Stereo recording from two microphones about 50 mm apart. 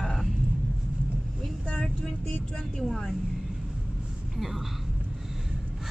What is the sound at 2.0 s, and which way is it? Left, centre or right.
Speech, centre.